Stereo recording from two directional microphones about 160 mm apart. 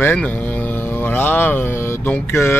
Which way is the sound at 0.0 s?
10° left (ahead or behind).